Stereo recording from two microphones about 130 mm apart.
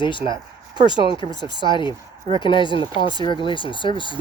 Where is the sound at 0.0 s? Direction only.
40° left (ahead or behind).